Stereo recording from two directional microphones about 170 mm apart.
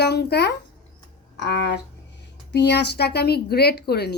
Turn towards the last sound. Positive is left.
turn(degrees=70)  # may be behind; listen again after turning